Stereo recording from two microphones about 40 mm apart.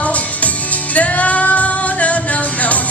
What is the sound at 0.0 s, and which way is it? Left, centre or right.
Music, left.